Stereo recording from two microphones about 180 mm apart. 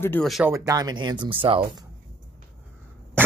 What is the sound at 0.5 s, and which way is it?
Speech, 20° right (ahead or behind).